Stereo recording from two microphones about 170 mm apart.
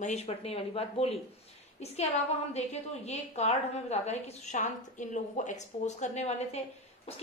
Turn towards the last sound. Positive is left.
turn(degrees=40)  # may be behind; listen again after turning